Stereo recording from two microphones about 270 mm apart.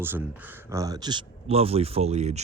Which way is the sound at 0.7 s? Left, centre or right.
Centre.